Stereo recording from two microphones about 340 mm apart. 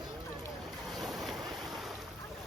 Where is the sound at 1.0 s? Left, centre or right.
Centre.